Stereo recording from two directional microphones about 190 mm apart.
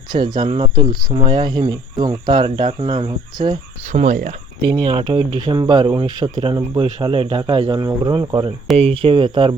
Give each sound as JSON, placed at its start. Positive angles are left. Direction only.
{"t": 0.1, "sound": "speech", "side_deg": -25}
{"t": 4.6, "sound": "speech", "side_deg": -25}
{"t": 8.7, "sound": "speech", "side_deg": -30}